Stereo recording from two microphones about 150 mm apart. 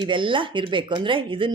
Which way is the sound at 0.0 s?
35° right (ahead or behind).